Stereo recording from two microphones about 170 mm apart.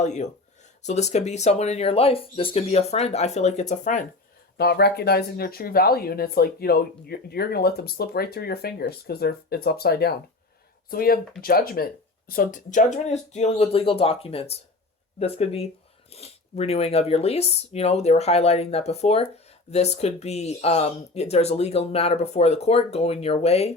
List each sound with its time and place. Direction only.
0.0 s speech: 45° left (ahead or behind)
4.5 s speech: 70° left (ahead or behind); by 23.7 s 40° left (ahead or behind)